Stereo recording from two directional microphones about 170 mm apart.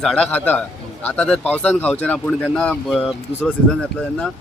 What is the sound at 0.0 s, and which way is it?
Speech, 5° left (ahead or behind).